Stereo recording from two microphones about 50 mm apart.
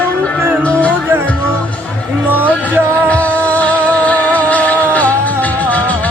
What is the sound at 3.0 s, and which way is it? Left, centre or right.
Music, left.